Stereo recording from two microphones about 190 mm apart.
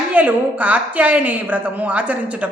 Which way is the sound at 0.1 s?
10° right (ahead or behind).